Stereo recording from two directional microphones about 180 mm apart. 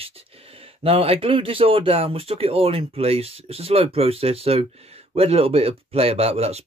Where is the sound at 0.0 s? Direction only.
30° right (ahead or behind).